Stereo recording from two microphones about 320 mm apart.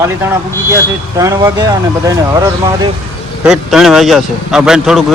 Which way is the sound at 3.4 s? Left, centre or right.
Centre.